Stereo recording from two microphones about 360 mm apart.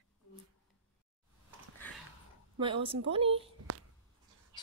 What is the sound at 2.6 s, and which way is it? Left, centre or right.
Speech, centre.